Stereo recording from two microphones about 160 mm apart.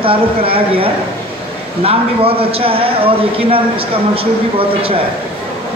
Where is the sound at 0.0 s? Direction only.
35° right (ahead or behind).